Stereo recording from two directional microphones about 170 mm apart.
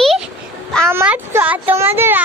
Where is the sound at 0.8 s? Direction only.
10° right (ahead or behind).